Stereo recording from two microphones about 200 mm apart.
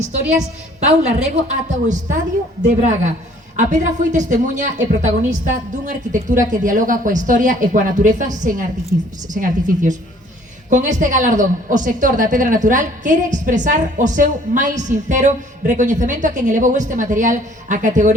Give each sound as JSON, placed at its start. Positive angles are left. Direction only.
{"t": 0.8, "sound": "a woman's voice", "side_deg": -35}